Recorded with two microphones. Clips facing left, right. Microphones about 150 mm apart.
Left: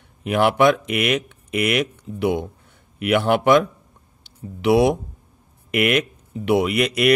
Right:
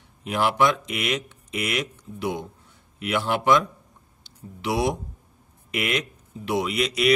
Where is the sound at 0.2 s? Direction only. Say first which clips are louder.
Left 5 dB; 60° left (ahead or behind).